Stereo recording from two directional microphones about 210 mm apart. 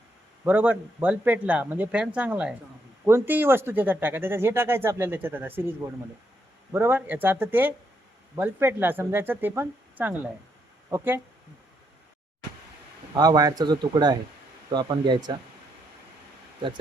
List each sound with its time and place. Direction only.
0.4 s speech: 10° right (ahead or behind)
13.1 s speech: 20° right (ahead or behind)
16.6 s speech: 25° right (ahead or behind)